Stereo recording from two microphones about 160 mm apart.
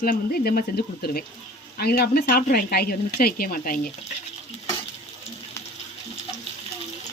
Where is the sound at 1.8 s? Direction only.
75° left (ahead or behind).